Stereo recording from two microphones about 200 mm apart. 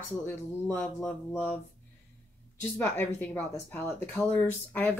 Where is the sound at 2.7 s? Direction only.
10° left (ahead or behind).